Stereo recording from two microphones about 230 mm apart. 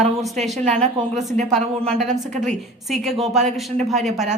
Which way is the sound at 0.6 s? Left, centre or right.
Right.